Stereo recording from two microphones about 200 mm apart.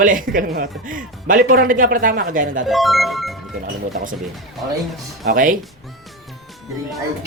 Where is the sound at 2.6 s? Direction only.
Centre (ahead or behind).